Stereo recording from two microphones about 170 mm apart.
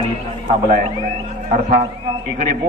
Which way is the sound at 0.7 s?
55° right (ahead or behind).